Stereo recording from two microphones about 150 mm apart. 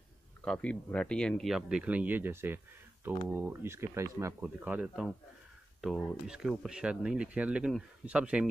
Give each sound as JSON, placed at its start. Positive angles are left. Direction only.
{"t": 0.5, "sound": "speech", "side_deg": 10}
{"t": 4.4, "sound": "speech", "side_deg": -10}
{"t": 5.8, "sound": "speech", "side_deg": 0}